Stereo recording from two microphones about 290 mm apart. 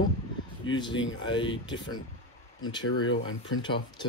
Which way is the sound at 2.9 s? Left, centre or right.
Left.